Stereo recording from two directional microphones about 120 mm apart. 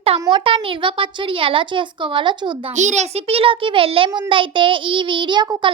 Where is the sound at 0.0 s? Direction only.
50° right (ahead or behind).